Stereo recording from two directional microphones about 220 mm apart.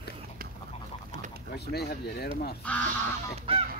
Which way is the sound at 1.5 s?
45° left (ahead or behind).